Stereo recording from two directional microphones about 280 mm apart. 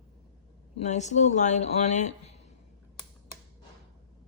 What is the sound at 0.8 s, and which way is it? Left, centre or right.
Speech, left.